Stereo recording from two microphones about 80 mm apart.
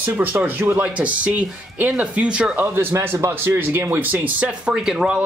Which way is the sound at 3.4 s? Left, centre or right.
Right.